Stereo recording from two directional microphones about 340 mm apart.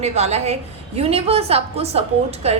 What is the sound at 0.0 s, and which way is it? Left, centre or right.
A woman's voice, centre.